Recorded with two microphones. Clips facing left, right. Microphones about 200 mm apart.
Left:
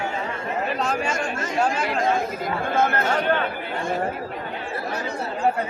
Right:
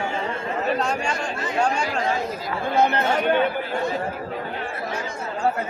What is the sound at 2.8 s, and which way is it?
Speech, 15° right (ahead or behind).